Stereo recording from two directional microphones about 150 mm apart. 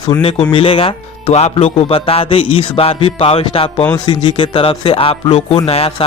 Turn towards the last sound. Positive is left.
turn(degrees=40)  # may be behind; listen again after turning